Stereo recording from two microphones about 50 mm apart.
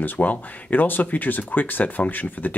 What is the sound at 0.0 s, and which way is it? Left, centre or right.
Speech, left.